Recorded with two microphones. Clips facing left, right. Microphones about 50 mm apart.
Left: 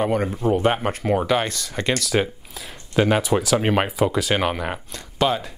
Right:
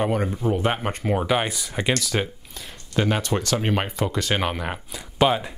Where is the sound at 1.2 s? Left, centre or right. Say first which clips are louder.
Left 1 dB; centre.